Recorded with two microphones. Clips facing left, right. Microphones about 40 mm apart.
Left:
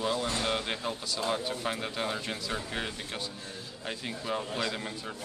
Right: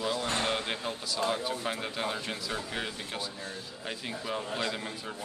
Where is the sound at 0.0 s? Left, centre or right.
Centre.